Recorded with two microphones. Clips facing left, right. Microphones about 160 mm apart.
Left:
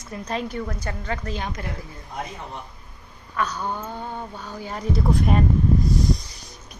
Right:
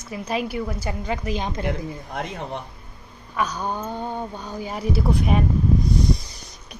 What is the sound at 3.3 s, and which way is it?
A woman's voice, 15° right (ahead or behind).